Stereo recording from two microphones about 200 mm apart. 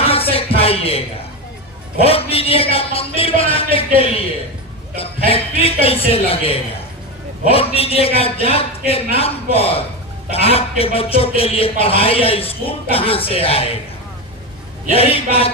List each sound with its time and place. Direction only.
0.0 s music: 30° left (ahead or behind)
2.0 s a man's voice: 30° left (ahead or behind)
14.8 s a man's voice: 30° left (ahead or behind)